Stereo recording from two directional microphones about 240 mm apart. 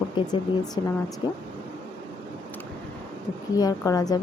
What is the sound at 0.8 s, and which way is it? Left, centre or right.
Speech, centre.